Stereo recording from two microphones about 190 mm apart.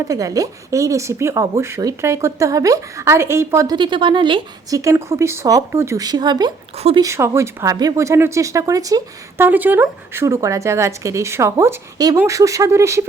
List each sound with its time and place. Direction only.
0.1 s speech: 15° right (ahead or behind)
6.7 s speech: 35° right (ahead or behind)
7.0 s speech: 15° right (ahead or behind)